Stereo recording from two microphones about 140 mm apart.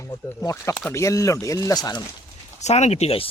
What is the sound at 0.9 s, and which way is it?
Speech, 20° left (ahead or behind).